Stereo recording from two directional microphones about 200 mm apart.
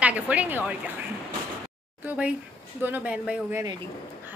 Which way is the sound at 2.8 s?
10° right (ahead or behind).